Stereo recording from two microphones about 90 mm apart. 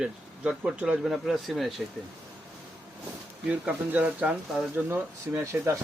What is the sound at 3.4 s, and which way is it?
Speech, 15° right (ahead or behind).